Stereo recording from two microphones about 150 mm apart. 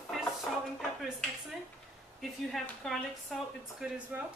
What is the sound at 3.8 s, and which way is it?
Speech, 10° right (ahead or behind).